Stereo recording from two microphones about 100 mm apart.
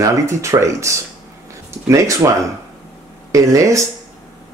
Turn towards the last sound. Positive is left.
turn(degrees=-30)  # may be behind; listen again after turning